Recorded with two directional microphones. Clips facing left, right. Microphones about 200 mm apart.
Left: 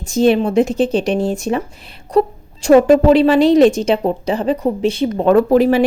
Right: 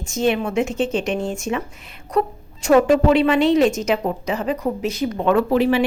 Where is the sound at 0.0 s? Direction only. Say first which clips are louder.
Left 7 dB; 35° left (ahead or behind).